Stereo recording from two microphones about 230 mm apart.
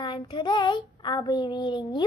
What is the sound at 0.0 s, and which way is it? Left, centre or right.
Child singing, centre.